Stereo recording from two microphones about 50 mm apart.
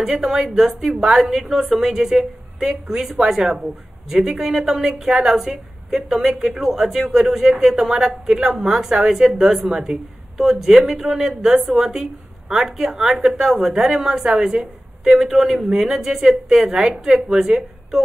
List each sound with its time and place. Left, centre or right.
0.0 s a woman's voice: centre